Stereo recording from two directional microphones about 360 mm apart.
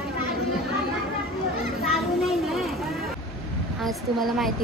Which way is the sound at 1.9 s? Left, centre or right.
Centre.